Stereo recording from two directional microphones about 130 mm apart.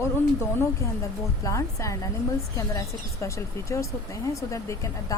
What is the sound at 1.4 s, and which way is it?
A woman's voice, 25° left (ahead or behind).